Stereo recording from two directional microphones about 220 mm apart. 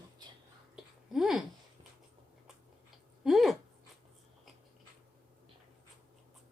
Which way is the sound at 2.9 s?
Centre (ahead or behind).